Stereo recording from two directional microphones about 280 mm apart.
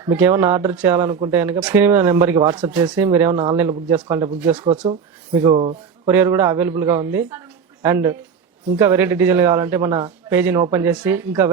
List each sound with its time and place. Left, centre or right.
0.0 s speech: centre
3.3 s speech: right
3.6 s a man's voice: centre